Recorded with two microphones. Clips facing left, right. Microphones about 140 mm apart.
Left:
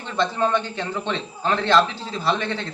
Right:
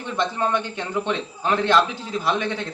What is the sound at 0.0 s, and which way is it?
A man's voice, 15° right (ahead or behind).